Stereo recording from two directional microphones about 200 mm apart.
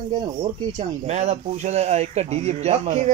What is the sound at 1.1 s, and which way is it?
Speech, 35° right (ahead or behind).